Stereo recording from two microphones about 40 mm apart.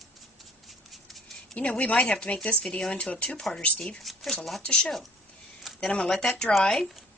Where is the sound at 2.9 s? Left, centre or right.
Left.